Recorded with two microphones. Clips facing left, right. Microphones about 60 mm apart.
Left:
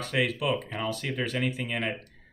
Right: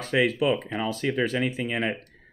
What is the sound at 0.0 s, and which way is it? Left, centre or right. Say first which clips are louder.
Speech: right 5 dB; centre.